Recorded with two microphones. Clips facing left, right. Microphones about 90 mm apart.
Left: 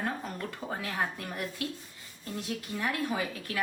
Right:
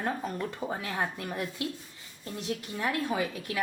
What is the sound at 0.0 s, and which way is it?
A woman's voice, 20° right (ahead or behind).